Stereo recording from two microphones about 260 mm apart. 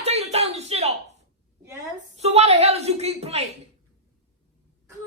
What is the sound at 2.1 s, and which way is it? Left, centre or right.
Speech, right.